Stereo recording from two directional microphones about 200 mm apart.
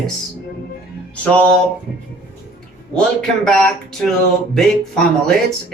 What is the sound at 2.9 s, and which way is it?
Speech, 5° left (ahead or behind).